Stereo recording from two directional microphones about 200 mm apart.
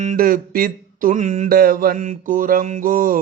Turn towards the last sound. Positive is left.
turn(degrees=-45)  # may be behind; listen again after turning